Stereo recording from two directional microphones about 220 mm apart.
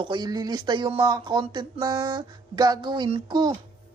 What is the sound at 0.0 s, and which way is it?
Speech, 20° right (ahead or behind).